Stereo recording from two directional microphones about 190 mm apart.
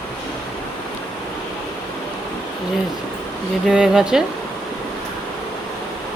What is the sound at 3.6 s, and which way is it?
Speech, 5° right (ahead or behind).